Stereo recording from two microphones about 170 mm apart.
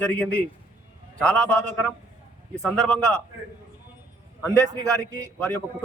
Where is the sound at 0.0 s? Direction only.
10° left (ahead or behind).